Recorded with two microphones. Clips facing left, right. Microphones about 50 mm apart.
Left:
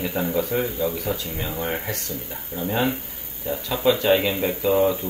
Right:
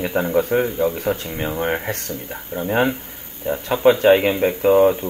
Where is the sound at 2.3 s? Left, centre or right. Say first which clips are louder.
Right 5 dB; right.